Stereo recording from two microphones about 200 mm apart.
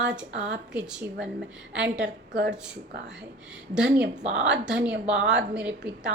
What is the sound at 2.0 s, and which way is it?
Speech, 55° right (ahead or behind).